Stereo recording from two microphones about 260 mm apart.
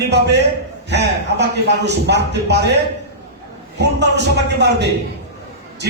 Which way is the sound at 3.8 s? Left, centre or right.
Right.